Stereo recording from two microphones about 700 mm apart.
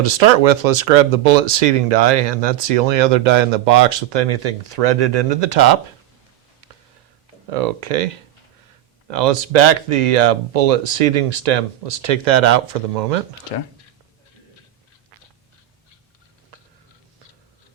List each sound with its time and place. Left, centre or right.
0.0 s speech: right
6.6 s a sound: right
7.5 s speech: right